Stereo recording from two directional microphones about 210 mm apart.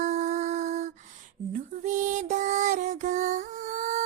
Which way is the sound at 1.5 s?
35° right (ahead or behind).